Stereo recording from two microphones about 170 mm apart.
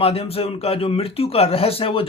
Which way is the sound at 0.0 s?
35° left (ahead or behind).